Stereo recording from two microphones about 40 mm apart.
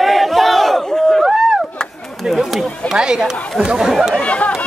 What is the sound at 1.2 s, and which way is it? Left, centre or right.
Chop, centre.